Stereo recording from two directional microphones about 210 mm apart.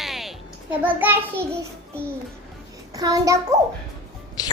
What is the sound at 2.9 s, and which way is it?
Speech, 15° right (ahead or behind).